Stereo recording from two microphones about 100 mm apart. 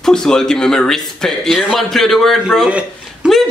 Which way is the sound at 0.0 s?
5° left (ahead or behind).